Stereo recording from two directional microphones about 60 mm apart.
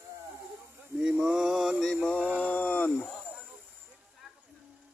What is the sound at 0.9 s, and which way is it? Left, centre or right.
Mantra, centre.